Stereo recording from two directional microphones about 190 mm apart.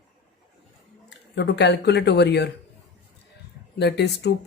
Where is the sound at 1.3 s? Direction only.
65° left (ahead or behind).